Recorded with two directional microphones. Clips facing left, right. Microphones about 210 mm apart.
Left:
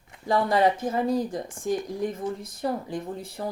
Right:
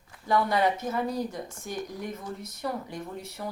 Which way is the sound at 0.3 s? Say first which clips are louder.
Left 3 dB; 30° left (ahead or behind).